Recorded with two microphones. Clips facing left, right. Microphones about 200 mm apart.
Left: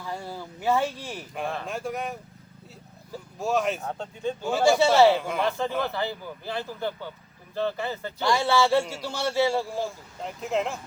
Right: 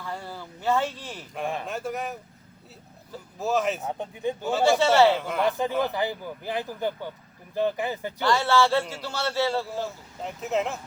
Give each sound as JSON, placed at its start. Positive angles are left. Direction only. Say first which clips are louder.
{"t": 0.0, "sound": "speech", "louder": "left 1 dB", "side_deg": 10}
{"t": 1.6, "sound": "speech", "louder": "even", "side_deg": 0}
{"t": 3.3, "sound": "speech", "louder": "even", "side_deg": 0}
{"t": 3.8, "sound": "speech", "louder": "right 1 dB", "side_deg": -15}
{"t": 4.5, "sound": "a man's voice", "louder": "left 1 dB", "side_deg": 10}
{"t": 5.1, "sound": "speech", "louder": "left 1 dB", "side_deg": 0}
{"t": 5.4, "sound": "speech", "louder": "right 2 dB", "side_deg": -15}
{"t": 8.2, "sound": "a man's voice", "louder": "even", "side_deg": 15}
{"t": 10.2, "sound": "speech", "louder": "even", "side_deg": 0}